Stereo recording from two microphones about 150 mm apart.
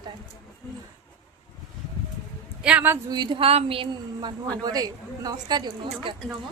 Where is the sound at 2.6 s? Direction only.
10° right (ahead or behind).